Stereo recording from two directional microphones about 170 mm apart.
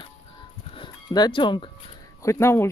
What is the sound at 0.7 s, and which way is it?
Music, 25° left (ahead or behind).